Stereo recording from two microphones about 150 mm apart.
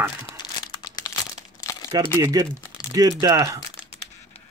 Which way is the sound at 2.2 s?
25° right (ahead or behind).